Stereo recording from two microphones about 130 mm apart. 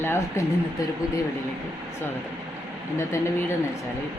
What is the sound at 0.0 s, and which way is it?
Speech, 20° left (ahead or behind).